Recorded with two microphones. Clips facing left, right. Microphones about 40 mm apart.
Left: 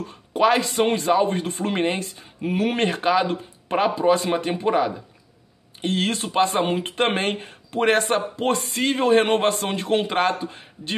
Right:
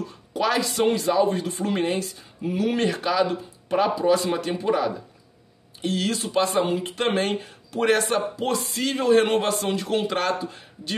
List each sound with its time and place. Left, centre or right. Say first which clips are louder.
0.3 s speech: left 5 dB; left